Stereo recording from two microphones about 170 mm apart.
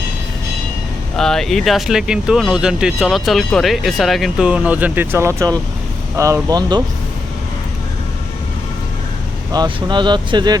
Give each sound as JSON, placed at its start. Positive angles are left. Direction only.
{"t": 1.1, "sound": "speech", "side_deg": 5}
{"t": 9.5, "sound": "speech", "side_deg": -25}